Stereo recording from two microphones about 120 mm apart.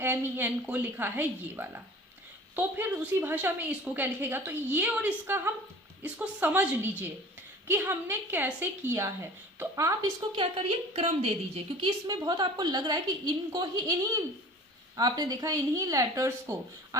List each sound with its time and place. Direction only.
0.0 s a woman's voice: 15° right (ahead or behind)
10.3 s a woman's voice: 50° right (ahead or behind)
11.9 s a woman's voice: 35° right (ahead or behind)